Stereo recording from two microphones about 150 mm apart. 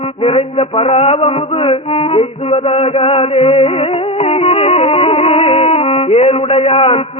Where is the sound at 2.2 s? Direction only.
40° left (ahead or behind).